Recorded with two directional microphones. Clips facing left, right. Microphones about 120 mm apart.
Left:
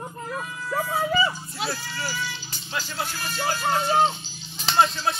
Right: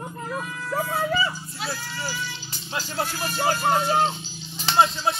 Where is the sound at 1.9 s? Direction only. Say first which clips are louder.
Left 1 dB; 20° right (ahead or behind).